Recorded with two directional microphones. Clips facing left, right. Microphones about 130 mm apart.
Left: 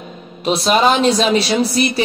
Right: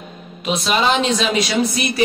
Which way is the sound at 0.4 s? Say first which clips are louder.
Left 5 dB; 35° left (ahead or behind).